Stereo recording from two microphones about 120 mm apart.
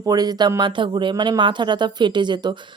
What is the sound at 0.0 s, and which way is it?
Speech, 35° right (ahead or behind).